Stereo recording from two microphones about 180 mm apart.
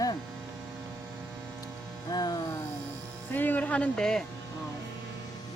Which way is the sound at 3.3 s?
10° left (ahead or behind).